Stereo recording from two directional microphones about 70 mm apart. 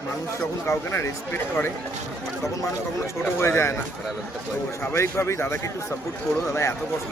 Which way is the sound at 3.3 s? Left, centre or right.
Left.